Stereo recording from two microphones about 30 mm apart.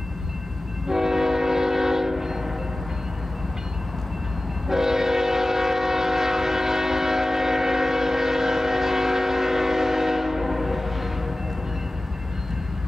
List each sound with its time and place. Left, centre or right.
0.8 s train: centre
4.6 s train: centre